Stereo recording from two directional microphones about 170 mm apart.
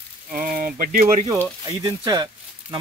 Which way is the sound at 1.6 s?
25° right (ahead or behind).